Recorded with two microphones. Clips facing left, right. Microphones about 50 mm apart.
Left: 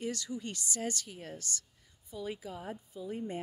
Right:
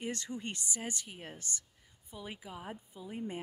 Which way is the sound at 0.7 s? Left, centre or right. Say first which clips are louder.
Left 3 dB; centre.